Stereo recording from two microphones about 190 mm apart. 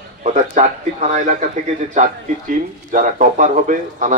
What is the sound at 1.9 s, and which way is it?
Speech, 40° right (ahead or behind).